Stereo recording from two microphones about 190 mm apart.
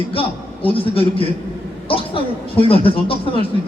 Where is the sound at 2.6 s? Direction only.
30° left (ahead or behind).